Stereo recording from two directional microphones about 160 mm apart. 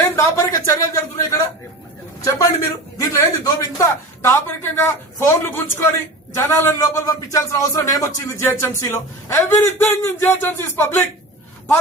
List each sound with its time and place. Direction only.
0.0 s a man's voice: 15° left (ahead or behind)